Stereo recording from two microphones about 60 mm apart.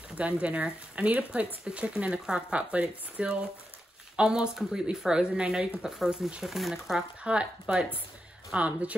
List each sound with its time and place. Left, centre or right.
0.2 s speech: right; by 7.1 s centre
7.2 s speech: centre